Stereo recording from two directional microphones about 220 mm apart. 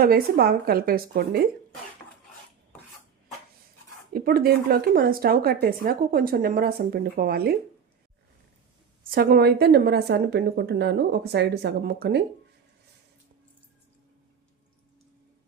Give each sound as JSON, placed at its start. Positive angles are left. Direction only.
{"t": 0.0, "sound": "a woman's voice", "side_deg": -45}
{"t": 4.1, "sound": "a woman's voice", "side_deg": -45}
{"t": 9.0, "sound": "a woman's voice", "side_deg": -45}